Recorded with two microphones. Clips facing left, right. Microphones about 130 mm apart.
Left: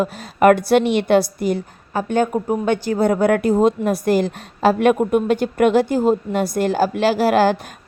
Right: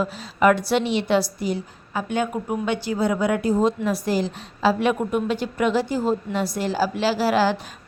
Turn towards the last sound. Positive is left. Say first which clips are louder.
# left 5 dB
turn(degrees=55)  # may be behind; listen again after turning